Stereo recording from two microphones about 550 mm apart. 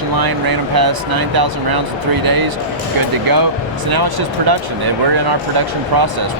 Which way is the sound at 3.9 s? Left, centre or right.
Right.